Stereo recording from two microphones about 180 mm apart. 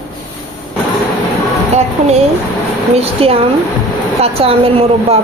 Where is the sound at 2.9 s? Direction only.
35° right (ahead or behind).